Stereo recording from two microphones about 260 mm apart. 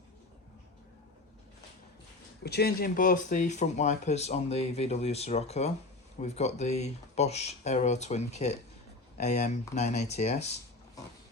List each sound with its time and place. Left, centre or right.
2.4 s speech: left